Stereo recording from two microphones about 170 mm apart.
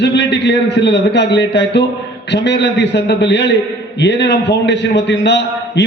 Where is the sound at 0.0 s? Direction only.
90° left.